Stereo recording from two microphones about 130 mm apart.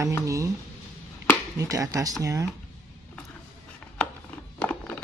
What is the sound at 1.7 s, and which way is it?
Speech, 25° right (ahead or behind).